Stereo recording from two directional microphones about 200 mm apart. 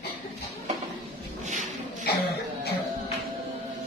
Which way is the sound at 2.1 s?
55° left (ahead or behind).